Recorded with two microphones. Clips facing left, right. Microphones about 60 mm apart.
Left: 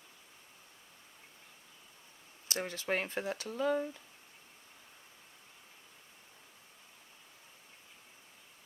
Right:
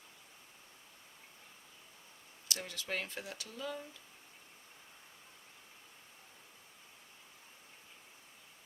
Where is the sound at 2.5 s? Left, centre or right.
Left.